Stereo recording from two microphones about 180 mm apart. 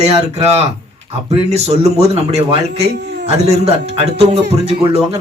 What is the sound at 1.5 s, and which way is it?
Speech, 35° right (ahead or behind).